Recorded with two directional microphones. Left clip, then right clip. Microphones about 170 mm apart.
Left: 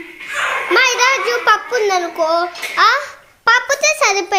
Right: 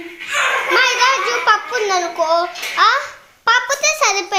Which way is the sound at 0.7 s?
25° left (ahead or behind).